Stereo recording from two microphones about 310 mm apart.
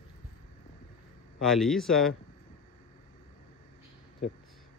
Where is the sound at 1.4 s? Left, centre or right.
Centre.